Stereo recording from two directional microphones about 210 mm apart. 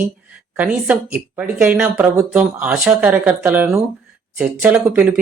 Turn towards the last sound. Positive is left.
turn(degrees=-5)  # may be behind; listen again after turning